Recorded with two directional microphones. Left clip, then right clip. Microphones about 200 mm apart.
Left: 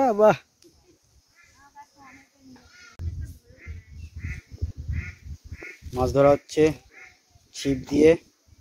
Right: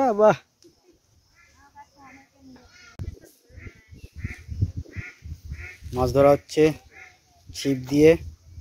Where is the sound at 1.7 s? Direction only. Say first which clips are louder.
Right 1 dB; 55° left (ahead or behind).